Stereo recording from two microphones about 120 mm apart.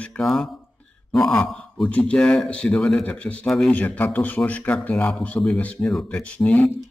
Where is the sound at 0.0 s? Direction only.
5° left (ahead or behind).